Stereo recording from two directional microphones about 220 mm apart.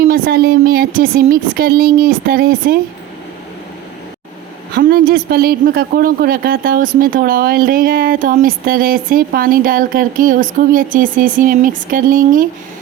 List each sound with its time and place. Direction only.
0.0 s speech: 45° right (ahead or behind)
4.7 s speech: 45° right (ahead or behind)